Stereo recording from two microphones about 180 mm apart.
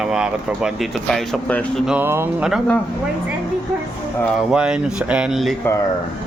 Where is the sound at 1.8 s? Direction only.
5° right (ahead or behind).